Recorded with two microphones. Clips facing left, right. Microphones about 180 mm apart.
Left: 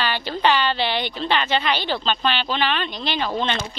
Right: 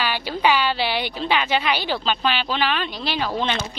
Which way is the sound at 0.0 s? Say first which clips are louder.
Even; 10° right (ahead or behind).